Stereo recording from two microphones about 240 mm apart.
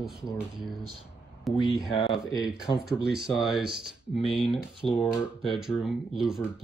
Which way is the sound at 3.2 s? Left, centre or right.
Centre.